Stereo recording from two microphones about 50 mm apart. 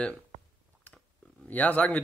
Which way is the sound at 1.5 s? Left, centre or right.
Left.